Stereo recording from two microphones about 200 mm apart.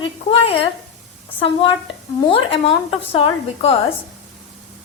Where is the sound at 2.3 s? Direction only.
30° left (ahead or behind).